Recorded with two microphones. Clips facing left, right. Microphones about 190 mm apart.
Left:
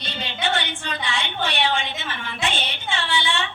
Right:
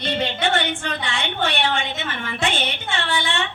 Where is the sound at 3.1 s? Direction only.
55° right (ahead or behind).